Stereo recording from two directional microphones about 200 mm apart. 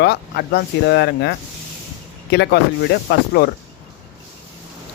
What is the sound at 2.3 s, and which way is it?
Speech, 55° left (ahead or behind).